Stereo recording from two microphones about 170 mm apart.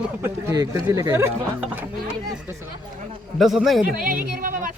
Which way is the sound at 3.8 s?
55° right (ahead or behind).